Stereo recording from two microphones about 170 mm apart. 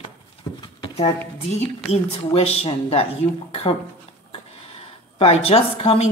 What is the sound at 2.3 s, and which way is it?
Speech, 35° left (ahead or behind).